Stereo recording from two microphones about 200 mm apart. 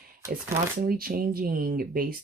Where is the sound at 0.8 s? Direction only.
45° right (ahead or behind).